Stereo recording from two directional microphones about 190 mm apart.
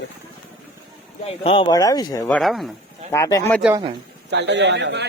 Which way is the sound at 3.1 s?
15° left (ahead or behind).